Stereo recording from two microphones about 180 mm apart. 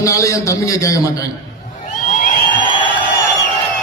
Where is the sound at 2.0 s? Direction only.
45° left (ahead or behind).